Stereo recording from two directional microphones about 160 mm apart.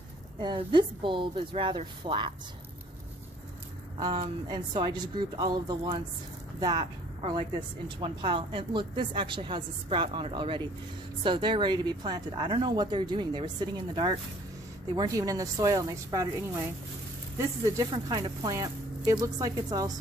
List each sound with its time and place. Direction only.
0.3 s speech: 30° right (ahead or behind)
4.0 s speech: 30° right (ahead or behind)
7.9 s speech: 30° right (ahead or behind)
17.3 s speech: 20° right (ahead or behind)